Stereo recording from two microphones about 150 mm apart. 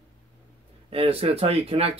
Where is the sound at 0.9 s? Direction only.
40° right (ahead or behind).